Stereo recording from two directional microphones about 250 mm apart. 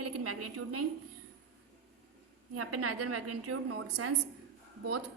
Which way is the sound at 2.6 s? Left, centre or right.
Right.